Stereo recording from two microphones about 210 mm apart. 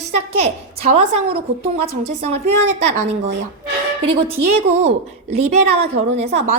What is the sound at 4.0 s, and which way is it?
A woman's voice, 25° right (ahead or behind).